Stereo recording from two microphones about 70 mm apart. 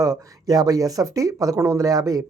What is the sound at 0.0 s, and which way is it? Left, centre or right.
Speech, right.